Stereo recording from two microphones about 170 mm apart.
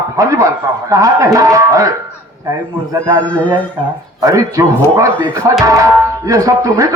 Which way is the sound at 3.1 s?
10° left (ahead or behind).